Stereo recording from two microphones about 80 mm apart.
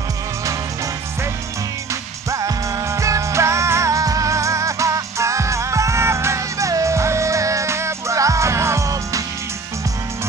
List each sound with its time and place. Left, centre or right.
2.3 s music: right